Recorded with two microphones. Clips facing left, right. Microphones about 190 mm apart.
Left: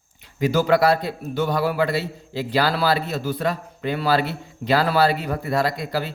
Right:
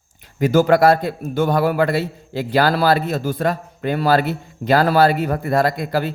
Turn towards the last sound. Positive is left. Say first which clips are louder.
# right 4 dB
turn(degrees=-50)  # may be behind; listen again after turning